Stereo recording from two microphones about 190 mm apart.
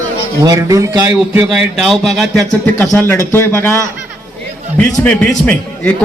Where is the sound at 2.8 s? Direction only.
15° left (ahead or behind).